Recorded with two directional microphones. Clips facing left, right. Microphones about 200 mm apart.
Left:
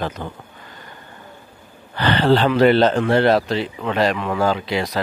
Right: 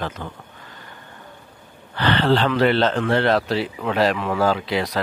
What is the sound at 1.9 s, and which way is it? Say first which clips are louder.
Speech: left 2 dB; 10° left (ahead or behind).